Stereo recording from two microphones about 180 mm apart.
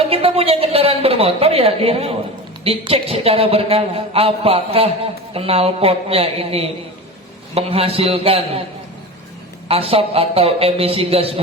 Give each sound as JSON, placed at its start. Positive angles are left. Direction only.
{"t": 0.0, "sound": "a woman's voice", "side_deg": -30}
{"t": 9.6, "sound": "a man's voice", "side_deg": -30}